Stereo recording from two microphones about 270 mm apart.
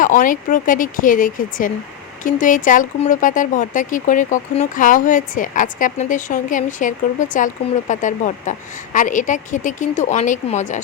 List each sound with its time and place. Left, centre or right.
0.0 s speech: left